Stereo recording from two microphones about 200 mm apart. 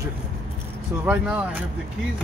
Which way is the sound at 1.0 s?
5° right (ahead or behind).